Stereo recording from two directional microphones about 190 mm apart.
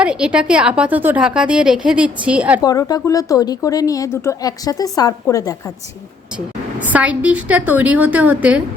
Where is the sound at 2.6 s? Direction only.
20° left (ahead or behind).